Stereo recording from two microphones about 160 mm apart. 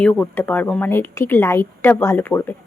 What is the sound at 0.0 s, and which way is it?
Speech, 10° left (ahead or behind).